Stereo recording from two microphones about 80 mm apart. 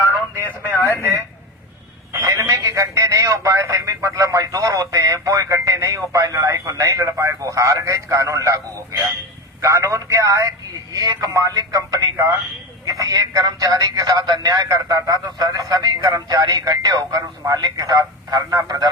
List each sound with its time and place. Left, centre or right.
0.4 s speech: left
2.2 s a sound: right
9.6 s speech: right
14.7 s speech: right